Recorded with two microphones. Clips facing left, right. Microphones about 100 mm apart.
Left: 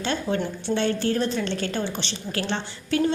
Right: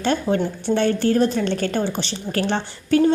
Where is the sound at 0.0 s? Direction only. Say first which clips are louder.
Right 5 dB; 40° right (ahead or behind).